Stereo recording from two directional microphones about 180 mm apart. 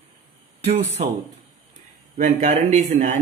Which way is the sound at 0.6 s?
35° right (ahead or behind).